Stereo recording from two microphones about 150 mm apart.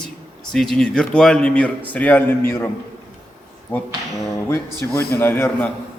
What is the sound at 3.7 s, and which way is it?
A man's voice, 15° left (ahead or behind).